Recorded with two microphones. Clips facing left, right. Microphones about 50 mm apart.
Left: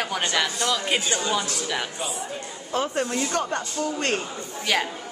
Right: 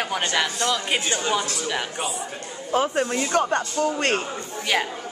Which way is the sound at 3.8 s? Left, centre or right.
Right.